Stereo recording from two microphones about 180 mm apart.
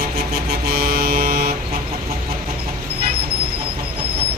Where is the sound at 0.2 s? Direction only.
60° right (ahead or behind).